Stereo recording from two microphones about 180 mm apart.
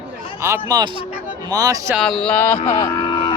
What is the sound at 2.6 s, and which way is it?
Vehicle, 20° left (ahead or behind).